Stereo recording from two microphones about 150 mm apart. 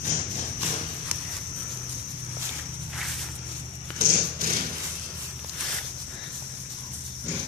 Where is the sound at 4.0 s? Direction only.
75° right (ahead or behind).